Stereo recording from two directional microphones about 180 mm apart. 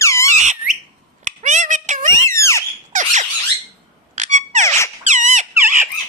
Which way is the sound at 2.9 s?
45° right (ahead or behind).